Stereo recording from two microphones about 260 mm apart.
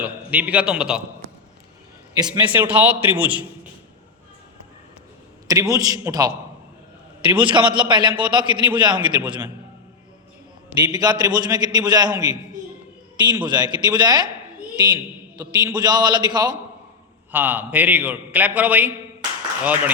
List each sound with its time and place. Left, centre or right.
0.0 s a man's voice: centre
2.2 s a man's voice: centre
5.5 s a man's voice: centre
7.4 s a man's voice: centre
10.8 s a man's voice: centre